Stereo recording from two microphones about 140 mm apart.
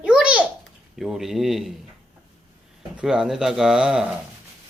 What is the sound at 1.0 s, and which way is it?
Speech, centre (ahead or behind).